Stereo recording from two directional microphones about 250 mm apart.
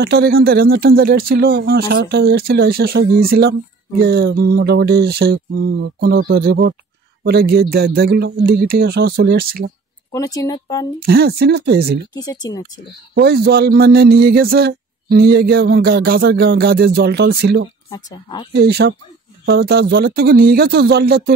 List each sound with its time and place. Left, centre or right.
0.0 s a man's voice: right
10.1 s speech: centre
11.1 s a man's voice: right
12.1 s speech: centre
13.1 s a man's voice: right
17.8 s speech: centre
18.5 s a man's voice: right